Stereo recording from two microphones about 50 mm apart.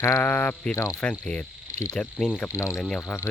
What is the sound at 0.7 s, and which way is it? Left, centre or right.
Speech, left.